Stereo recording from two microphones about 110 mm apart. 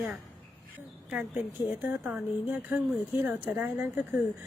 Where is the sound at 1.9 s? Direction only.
15° right (ahead or behind).